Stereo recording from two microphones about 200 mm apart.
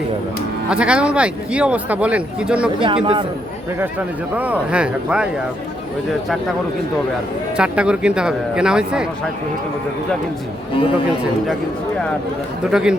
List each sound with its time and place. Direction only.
0.7 s speech: 5° right (ahead or behind)
2.8 s speech: 25° right (ahead or behind)
3.8 s a man's voice: 10° right (ahead or behind)
7.5 s speech: 5° right (ahead or behind)
12.7 s speech: 5° right (ahead or behind)